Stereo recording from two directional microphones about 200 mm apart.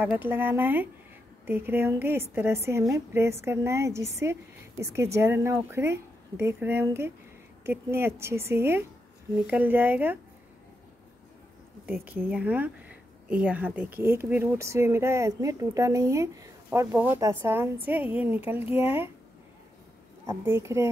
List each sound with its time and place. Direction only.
0.0 s speech: 10° right (ahead or behind)
11.8 s speech: 5° right (ahead or behind)
20.2 s speech: 15° right (ahead or behind)